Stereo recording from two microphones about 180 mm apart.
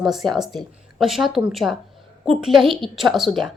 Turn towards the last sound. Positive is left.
turn(degrees=0)  # may be behind; listen again after turning